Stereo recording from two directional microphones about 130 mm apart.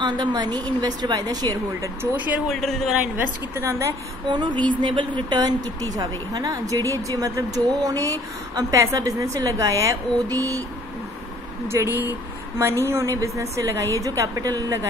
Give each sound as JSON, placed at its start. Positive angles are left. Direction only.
{"t": 0.0, "sound": "a woman's voice", "side_deg": -35}
{"t": 2.1, "sound": "speech", "side_deg": -10}
{"t": 2.4, "sound": "speech", "side_deg": 0}
{"t": 3.5, "sound": "a woman's voice", "side_deg": -20}
{"t": 4.3, "sound": "a woman's voice", "side_deg": -35}
{"t": 11.6, "sound": "a woman's voice", "side_deg": -20}